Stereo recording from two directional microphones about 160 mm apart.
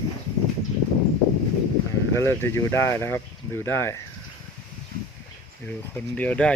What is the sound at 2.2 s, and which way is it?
Speech, 15° left (ahead or behind).